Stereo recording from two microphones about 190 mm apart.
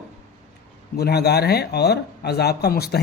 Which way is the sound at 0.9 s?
60° left (ahead or behind).